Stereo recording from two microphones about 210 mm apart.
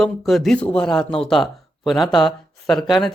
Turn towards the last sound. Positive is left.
turn(degrees=0)  # may be behind; listen again after turning